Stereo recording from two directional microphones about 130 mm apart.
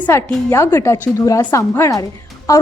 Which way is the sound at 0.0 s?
20° left (ahead or behind).